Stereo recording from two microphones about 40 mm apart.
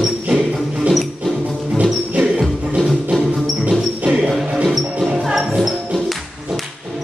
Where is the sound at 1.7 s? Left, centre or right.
Right.